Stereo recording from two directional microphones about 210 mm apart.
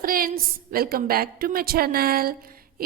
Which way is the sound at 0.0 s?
40° right (ahead or behind).